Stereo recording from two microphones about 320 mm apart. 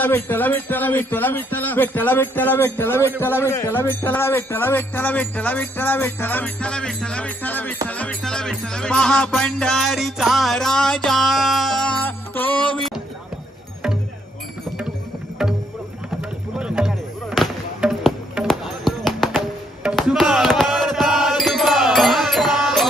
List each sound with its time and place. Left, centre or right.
0.0 s music: centre
3.2 s speech: centre
7.9 s music: centre
16.2 s a sound: centre